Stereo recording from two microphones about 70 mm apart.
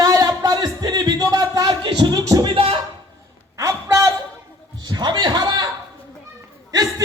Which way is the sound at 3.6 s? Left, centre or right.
Right.